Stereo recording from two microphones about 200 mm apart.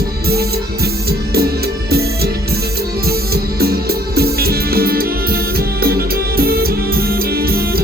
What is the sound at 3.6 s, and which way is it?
Music, 50° right (ahead or behind).